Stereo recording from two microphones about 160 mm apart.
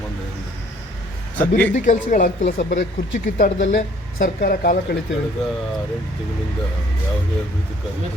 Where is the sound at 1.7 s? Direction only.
55° left (ahead or behind).